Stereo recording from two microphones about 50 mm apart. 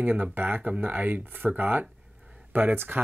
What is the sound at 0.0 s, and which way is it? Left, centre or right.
Speech, right.